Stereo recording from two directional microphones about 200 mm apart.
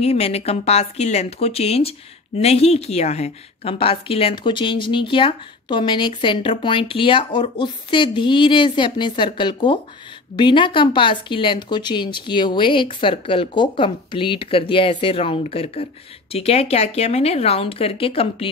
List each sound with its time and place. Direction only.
0.0 s speech: 30° left (ahead or behind)